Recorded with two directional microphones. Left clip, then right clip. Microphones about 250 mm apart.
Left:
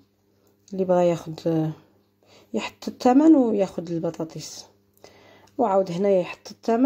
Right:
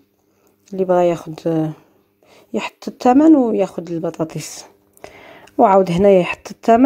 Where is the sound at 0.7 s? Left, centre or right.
Right.